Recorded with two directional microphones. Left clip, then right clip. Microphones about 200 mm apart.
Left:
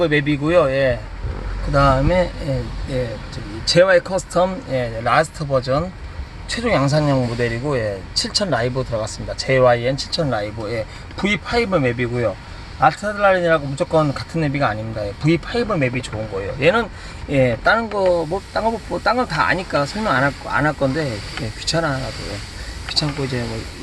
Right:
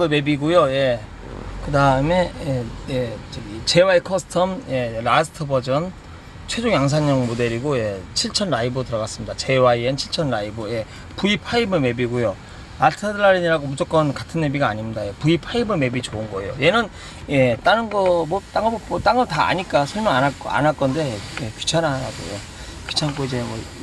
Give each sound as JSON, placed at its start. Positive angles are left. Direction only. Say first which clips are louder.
{"t": 0.0, "sound": "speech", "louder": "left 1 dB", "side_deg": -5}
{"t": 3.7, "sound": "speech", "louder": "left 2 dB", "side_deg": -5}